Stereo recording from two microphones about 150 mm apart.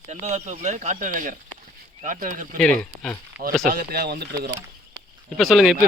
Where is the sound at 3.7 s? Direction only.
90° right.